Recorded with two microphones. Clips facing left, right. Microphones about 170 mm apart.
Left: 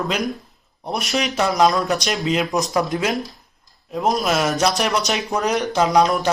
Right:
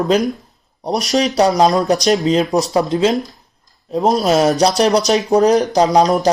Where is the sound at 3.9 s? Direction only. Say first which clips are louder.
Right 6 dB; 35° right (ahead or behind).